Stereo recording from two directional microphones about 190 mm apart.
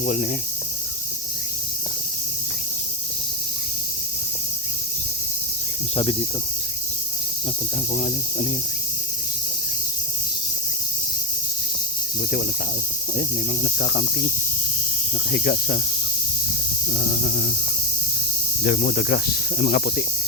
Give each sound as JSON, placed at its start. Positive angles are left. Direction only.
{"t": 0.0, "sound": "cricket", "side_deg": 45}
{"t": 6.0, "sound": "cricket", "side_deg": 30}
{"t": 7.9, "sound": "cricket", "side_deg": 45}
{"t": 13.1, "sound": "cricket", "side_deg": 50}
{"t": 15.3, "sound": "cricket", "side_deg": 55}
{"t": 16.9, "sound": "speech", "side_deg": 60}
{"t": 18.6, "sound": "speech", "side_deg": 55}